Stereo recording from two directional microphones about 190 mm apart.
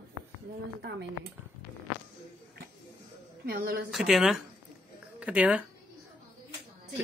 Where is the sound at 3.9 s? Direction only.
Centre (ahead or behind).